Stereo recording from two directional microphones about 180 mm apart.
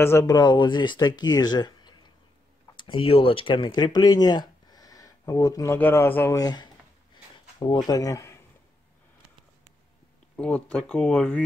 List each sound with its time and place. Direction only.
0.0 s speech: 15° left (ahead or behind)
10.3 s speech: 5° left (ahead or behind)